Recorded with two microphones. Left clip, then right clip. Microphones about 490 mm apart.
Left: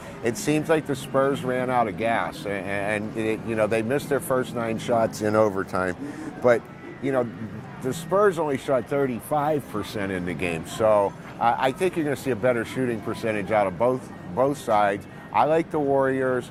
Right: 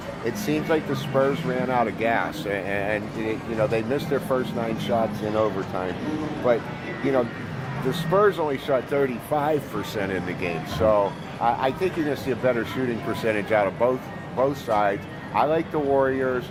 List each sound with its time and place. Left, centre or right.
0.3 s speech: left
6.4 s a man's voice: left
7.9 s speech: left